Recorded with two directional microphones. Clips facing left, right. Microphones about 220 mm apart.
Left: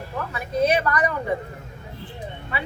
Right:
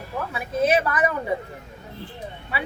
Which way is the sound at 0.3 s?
5° right (ahead or behind).